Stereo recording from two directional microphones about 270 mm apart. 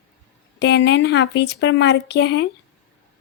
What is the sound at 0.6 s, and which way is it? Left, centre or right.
A woman's voice, left.